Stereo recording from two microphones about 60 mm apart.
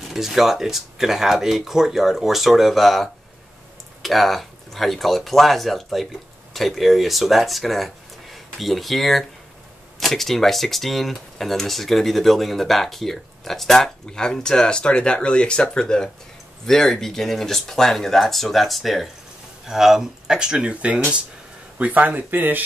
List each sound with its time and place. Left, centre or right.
0.1 s speech: centre; by 22.7 s right